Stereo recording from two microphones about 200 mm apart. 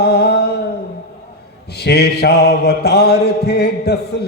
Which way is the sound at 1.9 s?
55° left (ahead or behind).